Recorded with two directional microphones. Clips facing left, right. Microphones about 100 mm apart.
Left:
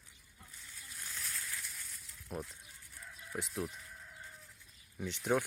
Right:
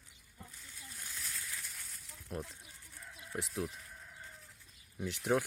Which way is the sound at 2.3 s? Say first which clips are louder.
Even; centre (ahead or behind).